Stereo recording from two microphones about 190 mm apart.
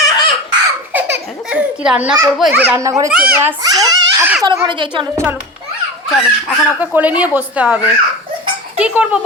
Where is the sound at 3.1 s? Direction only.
5° right (ahead or behind).